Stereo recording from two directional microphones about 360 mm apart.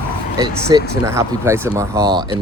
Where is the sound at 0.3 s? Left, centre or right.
Centre.